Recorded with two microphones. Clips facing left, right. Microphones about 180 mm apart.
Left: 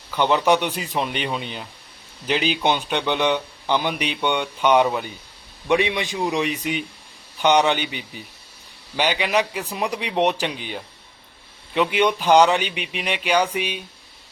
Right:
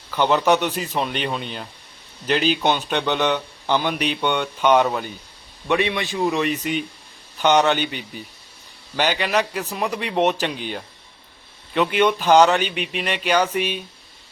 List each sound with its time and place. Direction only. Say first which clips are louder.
0.3 s speech: right 1 dB; 10° left (ahead or behind)
4.9 s speech: even; centre (ahead or behind)
5.6 s speech: left 1 dB; 15° left (ahead or behind)
9.0 s speech: even; 10° left (ahead or behind)
11.7 s speech: right 1 dB; 15° left (ahead or behind)